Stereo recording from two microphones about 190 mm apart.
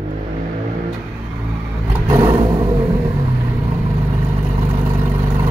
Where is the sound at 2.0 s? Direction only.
15° right (ahead or behind).